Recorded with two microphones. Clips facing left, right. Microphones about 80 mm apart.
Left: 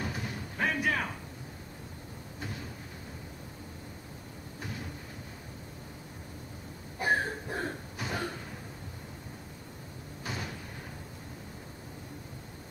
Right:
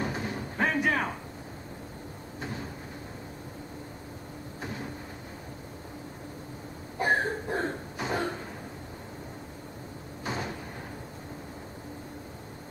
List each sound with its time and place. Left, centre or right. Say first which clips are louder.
0.0 s a sound: right 5 dB; right
7.0 s cough: right 3 dB; right
10.2 s cupboard open or close: right 5 dB; right